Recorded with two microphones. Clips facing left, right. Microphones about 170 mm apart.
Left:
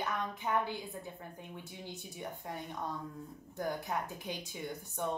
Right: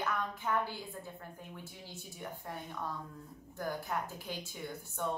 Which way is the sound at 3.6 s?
20° left (ahead or behind).